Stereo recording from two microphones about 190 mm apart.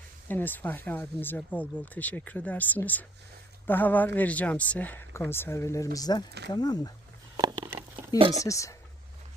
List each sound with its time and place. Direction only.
0.3 s speech: 10° left (ahead or behind)
7.3 s a sound: 20° right (ahead or behind)
8.1 s speech: 20° left (ahead or behind)